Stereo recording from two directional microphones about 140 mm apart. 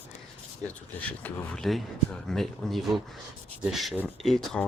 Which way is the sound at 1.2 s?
5° left (ahead or behind).